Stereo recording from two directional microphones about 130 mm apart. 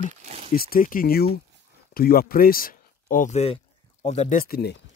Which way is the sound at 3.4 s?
50° left (ahead or behind).